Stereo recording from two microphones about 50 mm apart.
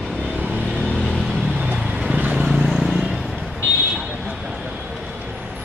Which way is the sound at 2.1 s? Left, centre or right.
Right.